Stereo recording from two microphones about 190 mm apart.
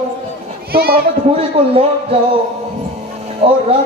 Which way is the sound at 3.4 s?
35° right (ahead or behind).